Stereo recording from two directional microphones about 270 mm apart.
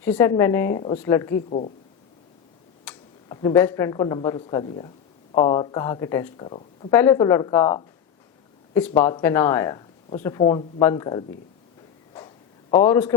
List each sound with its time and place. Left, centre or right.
0.0 s speech: centre
0.8 s speech: left
1.0 s speech: centre
1.5 s speech: left
2.9 s a sound: centre
3.2 s speech: centre
9.0 s speech: centre
12.7 s speech: centre